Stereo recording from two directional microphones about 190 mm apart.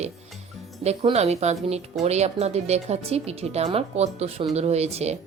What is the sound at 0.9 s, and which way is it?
A woman's voice, 35° right (ahead or behind).